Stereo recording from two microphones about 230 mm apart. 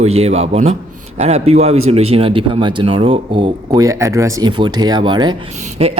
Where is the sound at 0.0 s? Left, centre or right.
Right.